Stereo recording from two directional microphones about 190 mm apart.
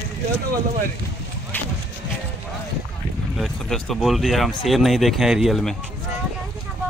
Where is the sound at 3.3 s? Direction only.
Centre (ahead or behind).